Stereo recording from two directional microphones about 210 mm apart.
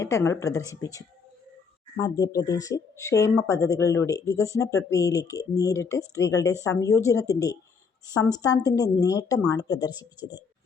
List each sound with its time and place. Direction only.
0.0 s speech: 15° left (ahead or behind)